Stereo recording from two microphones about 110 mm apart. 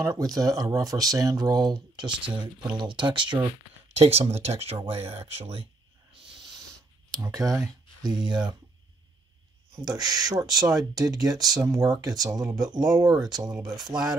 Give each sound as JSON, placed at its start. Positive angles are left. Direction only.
{"t": 0.0, "sound": "speech", "side_deg": -30}
{"t": 3.9, "sound": "speech", "side_deg": -70}
{"t": 7.2, "sound": "speech", "side_deg": -30}
{"t": 8.0, "sound": "speech", "side_deg": -40}
{"t": 9.8, "sound": "speech", "side_deg": -40}